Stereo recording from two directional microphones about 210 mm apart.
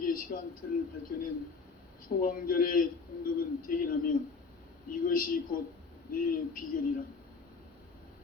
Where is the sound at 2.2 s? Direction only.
40° left (ahead or behind).